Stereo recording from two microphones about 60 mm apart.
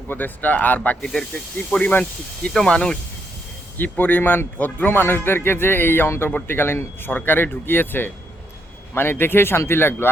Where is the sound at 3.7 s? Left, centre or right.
Left.